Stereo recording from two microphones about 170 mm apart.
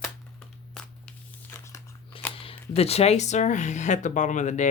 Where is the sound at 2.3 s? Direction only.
35° left (ahead or behind).